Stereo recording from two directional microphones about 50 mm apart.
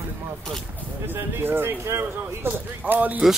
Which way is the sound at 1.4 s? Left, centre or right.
Right.